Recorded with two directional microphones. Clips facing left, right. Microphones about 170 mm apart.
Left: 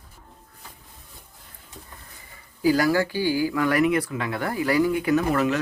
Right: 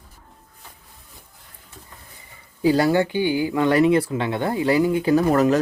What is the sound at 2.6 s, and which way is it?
Speech, 25° right (ahead or behind).